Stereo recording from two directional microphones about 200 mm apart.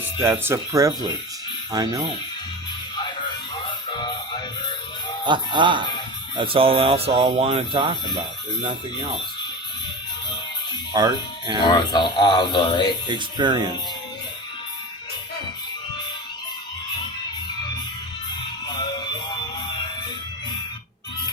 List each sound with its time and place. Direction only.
0.2 s speech: 10° right (ahead or behind)
2.9 s music: 20° left (ahead or behind)
5.2 s speech: 25° right (ahead or behind)
10.9 s speech: 20° right (ahead or behind)
11.6 s speech: 20° left (ahead or behind)
13.1 s speech: 20° right (ahead or behind)
18.7 s music: 20° left (ahead or behind)